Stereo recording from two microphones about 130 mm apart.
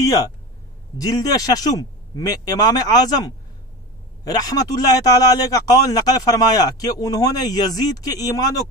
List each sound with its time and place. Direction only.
0.0 s a man's voice: 30° left (ahead or behind)